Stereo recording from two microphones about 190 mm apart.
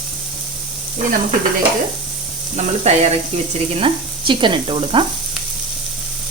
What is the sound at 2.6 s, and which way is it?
Speech, 35° right (ahead or behind).